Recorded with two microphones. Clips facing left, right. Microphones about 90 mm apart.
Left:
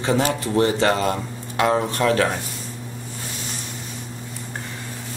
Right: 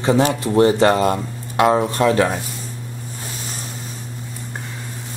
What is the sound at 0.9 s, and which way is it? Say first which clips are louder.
Speech: right 4 dB; 10° right (ahead or behind).